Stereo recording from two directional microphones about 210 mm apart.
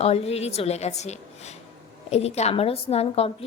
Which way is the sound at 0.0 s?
30° left (ahead or behind).